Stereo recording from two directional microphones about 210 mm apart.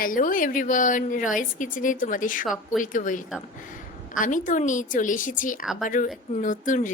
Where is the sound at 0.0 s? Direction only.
40° left (ahead or behind).